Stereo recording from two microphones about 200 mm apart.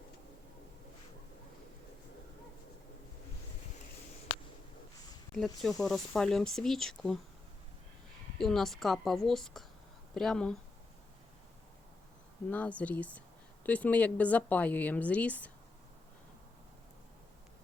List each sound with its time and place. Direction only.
5.6 s speech: centre (ahead or behind)
8.4 s speech: centre (ahead or behind)
12.5 s a woman's voice: 5° left (ahead or behind)